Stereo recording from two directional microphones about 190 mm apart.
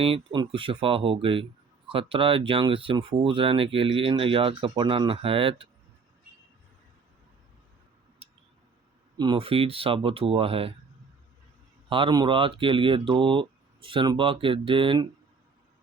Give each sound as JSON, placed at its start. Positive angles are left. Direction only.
{"t": 0.0, "sound": "speech", "side_deg": -30}
{"t": 9.1, "sound": "speech", "side_deg": -25}
{"t": 11.9, "sound": "speech", "side_deg": -25}